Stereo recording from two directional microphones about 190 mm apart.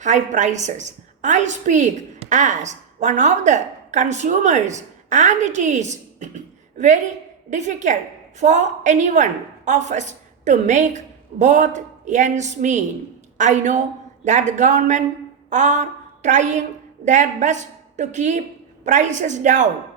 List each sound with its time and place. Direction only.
0.0 s a woman's voice: 40° right (ahead or behind)